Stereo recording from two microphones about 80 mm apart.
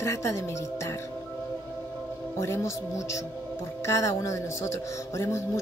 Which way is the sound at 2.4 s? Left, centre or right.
Left.